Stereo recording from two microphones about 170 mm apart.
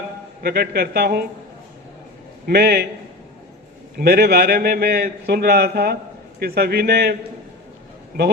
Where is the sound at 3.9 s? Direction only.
65° right (ahead or behind).